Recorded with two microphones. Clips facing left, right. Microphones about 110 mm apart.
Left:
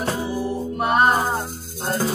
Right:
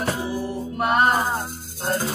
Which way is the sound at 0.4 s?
10° left (ahead or behind).